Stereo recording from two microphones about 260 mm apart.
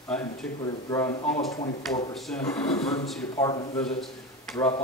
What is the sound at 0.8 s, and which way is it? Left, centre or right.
A man's voice, centre.